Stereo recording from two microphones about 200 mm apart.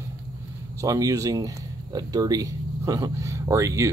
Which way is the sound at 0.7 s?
15° right (ahead or behind).